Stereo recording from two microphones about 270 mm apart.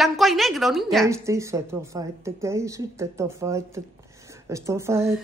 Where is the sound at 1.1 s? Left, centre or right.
Centre.